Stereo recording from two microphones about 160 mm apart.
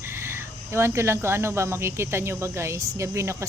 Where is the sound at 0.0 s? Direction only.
15° right (ahead or behind).